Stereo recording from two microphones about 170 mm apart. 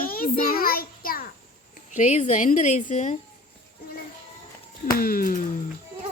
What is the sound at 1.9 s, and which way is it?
A woman's voice, 45° left (ahead or behind).